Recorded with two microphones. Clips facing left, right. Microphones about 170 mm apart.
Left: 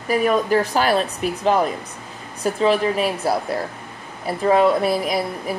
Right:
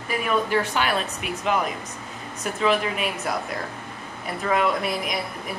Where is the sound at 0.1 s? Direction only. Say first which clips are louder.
Left 6 dB; 40° left (ahead or behind).